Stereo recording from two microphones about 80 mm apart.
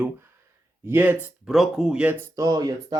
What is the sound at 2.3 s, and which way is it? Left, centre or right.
Speech, right.